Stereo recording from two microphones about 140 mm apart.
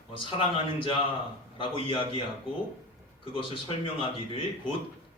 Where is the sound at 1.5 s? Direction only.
35° left (ahead or behind).